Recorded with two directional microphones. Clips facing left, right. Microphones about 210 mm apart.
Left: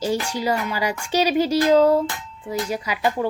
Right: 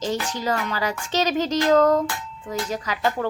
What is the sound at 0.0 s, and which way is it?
A woman's voice, 10° left (ahead or behind).